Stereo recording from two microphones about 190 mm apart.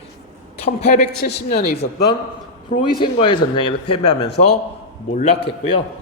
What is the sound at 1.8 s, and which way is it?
Speech, 55° left (ahead or behind).